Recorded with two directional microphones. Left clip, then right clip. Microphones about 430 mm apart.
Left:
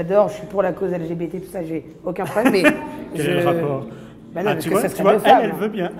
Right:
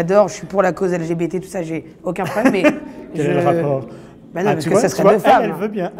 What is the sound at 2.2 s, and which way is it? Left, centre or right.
A man's voice, right.